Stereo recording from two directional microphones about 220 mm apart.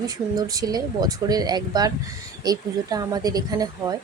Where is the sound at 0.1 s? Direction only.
15° right (ahead or behind).